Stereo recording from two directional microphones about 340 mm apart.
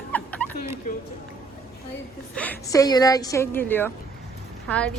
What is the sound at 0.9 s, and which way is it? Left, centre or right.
Speech, left.